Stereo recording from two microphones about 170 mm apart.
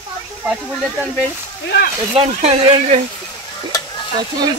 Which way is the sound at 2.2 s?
40° right (ahead or behind).